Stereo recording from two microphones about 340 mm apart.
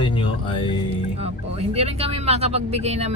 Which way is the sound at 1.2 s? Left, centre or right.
Centre.